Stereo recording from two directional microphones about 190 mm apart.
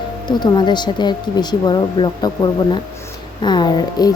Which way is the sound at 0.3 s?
25° left (ahead or behind).